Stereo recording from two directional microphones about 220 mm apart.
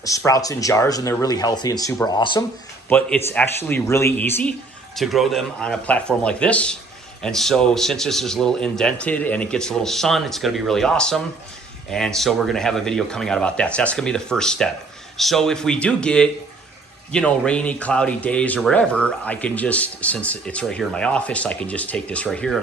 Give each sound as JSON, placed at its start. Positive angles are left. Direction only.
{"t": 0.3, "sound": "speech", "side_deg": 15}
{"t": 2.9, "sound": "speech", "side_deg": 10}